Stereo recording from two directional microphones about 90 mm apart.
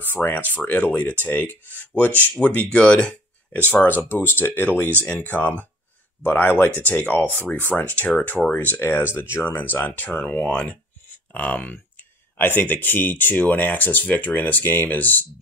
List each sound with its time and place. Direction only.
0.0 s speech: 20° left (ahead or behind)